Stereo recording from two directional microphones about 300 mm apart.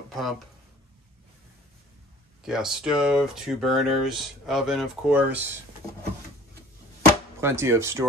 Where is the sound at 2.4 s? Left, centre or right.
Centre.